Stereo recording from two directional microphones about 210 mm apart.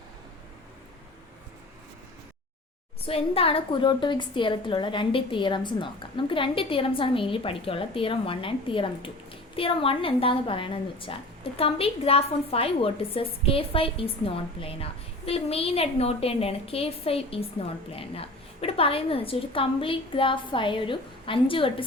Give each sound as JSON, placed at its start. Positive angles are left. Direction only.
{"t": 3.1, "sound": "a woman's voice", "side_deg": 25}